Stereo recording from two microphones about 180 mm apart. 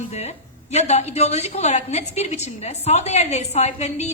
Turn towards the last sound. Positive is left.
turn(degrees=40)  # may be behind; listen again after turning